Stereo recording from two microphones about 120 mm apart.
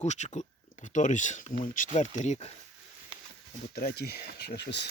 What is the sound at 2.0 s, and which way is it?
Speech, 75° left (ahead or behind).